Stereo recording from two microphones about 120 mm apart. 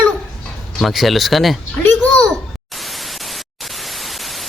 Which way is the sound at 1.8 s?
10° left (ahead or behind).